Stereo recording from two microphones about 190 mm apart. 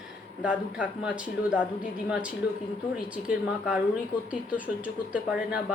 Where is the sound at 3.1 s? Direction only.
5° right (ahead or behind).